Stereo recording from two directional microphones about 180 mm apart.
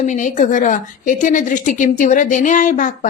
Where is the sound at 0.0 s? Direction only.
45° left (ahead or behind).